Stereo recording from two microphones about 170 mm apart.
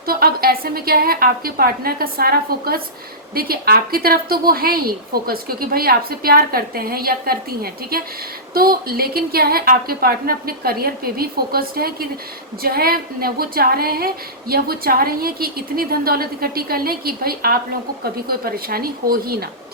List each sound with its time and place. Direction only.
0.0 s a woman's voice: 60° right (ahead or behind)